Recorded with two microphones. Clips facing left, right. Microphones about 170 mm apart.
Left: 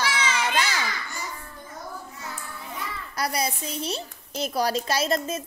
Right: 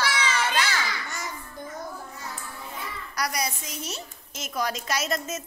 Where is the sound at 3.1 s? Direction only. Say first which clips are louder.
Left 2 dB; 25° left (ahead or behind).